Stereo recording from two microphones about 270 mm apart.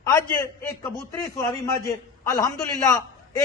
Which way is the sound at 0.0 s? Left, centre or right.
Centre.